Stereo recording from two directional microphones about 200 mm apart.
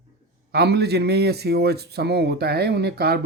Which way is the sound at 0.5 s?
55° right (ahead or behind).